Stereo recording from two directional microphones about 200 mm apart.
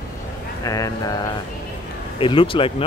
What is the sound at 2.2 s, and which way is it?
Speech, 25° left (ahead or behind).